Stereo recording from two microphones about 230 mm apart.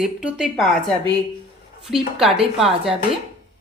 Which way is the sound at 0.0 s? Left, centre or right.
Centre.